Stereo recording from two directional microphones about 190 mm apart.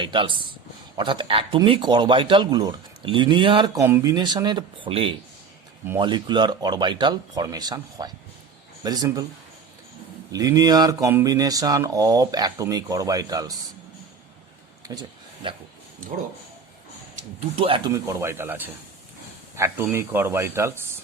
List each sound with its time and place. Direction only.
0.0 s speech: 25° right (ahead or behind)
10.3 s speech: 20° right (ahead or behind)
14.9 s speech: 20° right (ahead or behind)
17.9 s speech: 15° right (ahead or behind)